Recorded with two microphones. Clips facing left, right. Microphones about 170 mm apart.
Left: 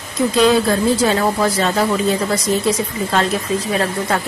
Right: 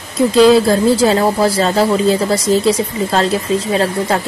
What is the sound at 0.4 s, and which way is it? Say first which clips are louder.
Speech: right 5 dB; 30° right (ahead or behind).